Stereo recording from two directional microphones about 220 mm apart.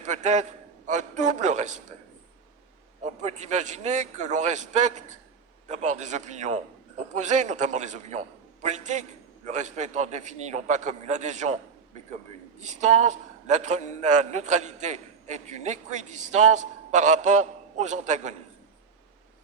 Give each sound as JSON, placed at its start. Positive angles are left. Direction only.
{"t": 0.0, "sound": "a man's voice", "side_deg": -35}
{"t": 3.0, "sound": "a man's voice", "side_deg": -30}